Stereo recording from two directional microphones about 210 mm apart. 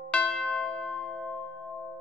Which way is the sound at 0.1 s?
5° left (ahead or behind).